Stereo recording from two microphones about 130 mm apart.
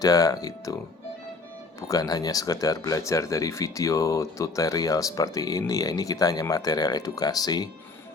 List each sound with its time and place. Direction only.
0.0 s speech: 30° left (ahead or behind)
1.9 s speech: 30° left (ahead or behind)